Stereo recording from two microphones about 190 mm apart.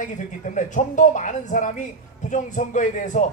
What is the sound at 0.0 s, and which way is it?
Speech, 40° left (ahead or behind).